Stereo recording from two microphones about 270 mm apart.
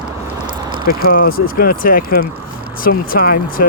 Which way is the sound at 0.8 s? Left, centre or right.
Left.